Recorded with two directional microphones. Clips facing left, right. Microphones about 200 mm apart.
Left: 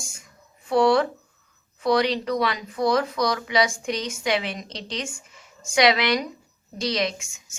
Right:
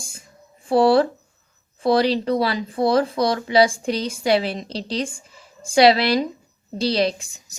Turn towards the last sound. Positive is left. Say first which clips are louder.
# right 7 dB
turn(degrees=-35)  # may be behind; listen again after turning